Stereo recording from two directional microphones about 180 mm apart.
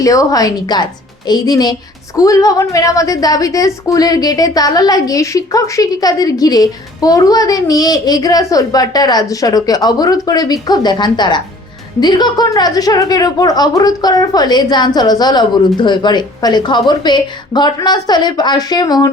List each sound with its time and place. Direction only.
0.0 s a woman's voice: 20° left (ahead or behind)